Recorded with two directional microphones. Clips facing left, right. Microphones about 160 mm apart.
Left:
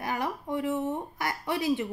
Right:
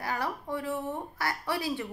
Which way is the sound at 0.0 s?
20° left (ahead or behind).